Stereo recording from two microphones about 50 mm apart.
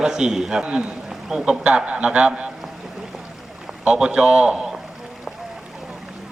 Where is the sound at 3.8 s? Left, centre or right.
Centre.